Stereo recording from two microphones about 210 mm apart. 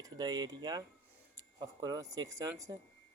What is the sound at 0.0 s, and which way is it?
Speech, 20° right (ahead or behind).